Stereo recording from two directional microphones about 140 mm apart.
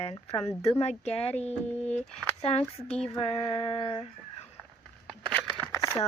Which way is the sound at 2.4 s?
45° left (ahead or behind).